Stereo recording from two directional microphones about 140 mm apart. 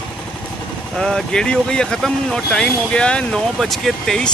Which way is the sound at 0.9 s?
5° left (ahead or behind).